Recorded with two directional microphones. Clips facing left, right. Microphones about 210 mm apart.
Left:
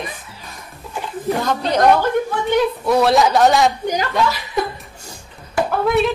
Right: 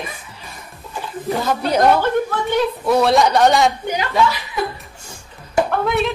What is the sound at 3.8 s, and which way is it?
Speech, 40° left (ahead or behind).